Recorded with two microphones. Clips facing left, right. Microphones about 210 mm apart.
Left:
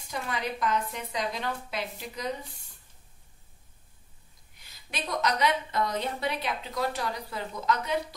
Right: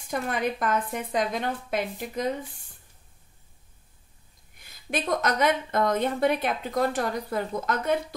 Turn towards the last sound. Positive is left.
turn(degrees=-50)  # may be behind; listen again after turning